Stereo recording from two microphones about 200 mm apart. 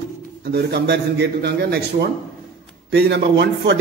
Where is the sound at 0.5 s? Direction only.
55° right (ahead or behind).